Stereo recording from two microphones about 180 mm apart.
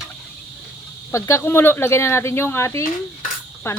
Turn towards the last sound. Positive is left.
turn(degrees=15)  # may be behind; listen again after turning